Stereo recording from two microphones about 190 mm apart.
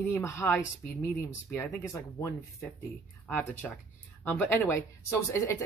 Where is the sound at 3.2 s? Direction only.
5° left (ahead or behind).